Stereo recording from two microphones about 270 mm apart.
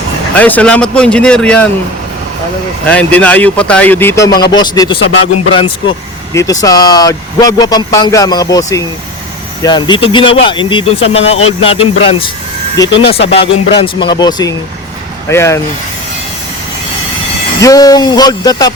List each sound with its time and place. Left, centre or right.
0.3 s speech: centre
2.8 s speech: centre
17.6 s speech: centre